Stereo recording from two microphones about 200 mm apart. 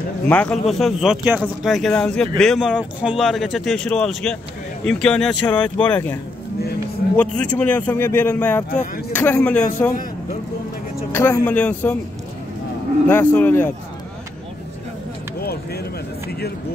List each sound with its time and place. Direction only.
0.3 s a man's voice: 5° left (ahead or behind)
7.2 s a man's voice: 5° left (ahead or behind)
11.1 s a man's voice: 10° left (ahead or behind)
13.1 s a man's voice: 10° left (ahead or behind)
15.4 s a sound: 50° left (ahead or behind)